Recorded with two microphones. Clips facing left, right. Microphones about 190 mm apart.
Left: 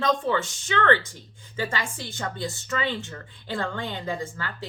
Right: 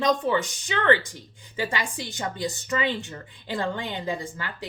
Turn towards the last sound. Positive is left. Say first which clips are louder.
# left 1 dB
turn(degrees=-15)  # may be behind; listen again after turning